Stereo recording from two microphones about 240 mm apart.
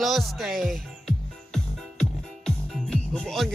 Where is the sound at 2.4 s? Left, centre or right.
Centre.